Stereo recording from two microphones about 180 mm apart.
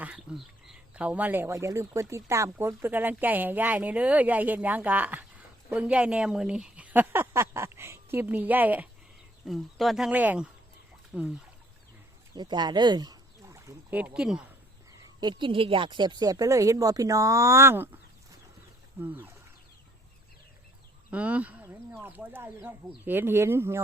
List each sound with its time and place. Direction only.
0.0 s speech: 5° right (ahead or behind)
12.3 s speech: 25° right (ahead or behind); by 14.4 s 5° right (ahead or behind)
15.0 s speech: 25° right (ahead or behind)
18.9 s speech: 10° right (ahead or behind)
21.1 s speech: 10° right (ahead or behind)